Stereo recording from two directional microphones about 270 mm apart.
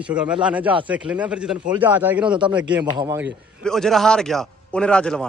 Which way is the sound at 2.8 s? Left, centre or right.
Centre.